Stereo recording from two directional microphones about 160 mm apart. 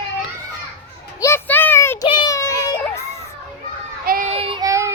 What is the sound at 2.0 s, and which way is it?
Child singing, 30° left (ahead or behind).